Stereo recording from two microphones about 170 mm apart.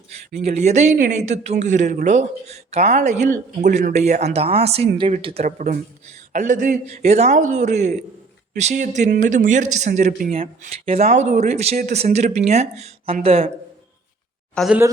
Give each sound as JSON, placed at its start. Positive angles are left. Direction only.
{"t": 0.3, "sound": "speech", "side_deg": -40}
{"t": 10.7, "sound": "speech", "side_deg": -40}
{"t": 14.5, "sound": "speech", "side_deg": 0}